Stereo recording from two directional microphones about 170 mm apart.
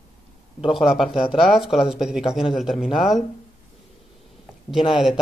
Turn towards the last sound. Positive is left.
turn(degrees=0)  # may be behind; listen again after turning